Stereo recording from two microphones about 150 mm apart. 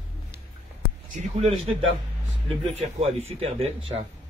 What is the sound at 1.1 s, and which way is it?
Speech, 45° right (ahead or behind).